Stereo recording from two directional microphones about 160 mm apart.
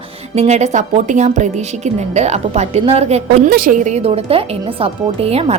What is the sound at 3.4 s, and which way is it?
Speech, 65° right (ahead or behind).